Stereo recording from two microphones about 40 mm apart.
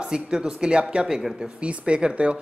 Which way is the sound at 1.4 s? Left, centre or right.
Right.